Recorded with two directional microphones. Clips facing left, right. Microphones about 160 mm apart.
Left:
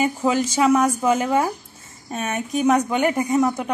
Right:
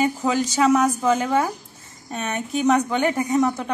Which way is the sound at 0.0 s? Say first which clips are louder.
Left 1 dB; 10° left (ahead or behind).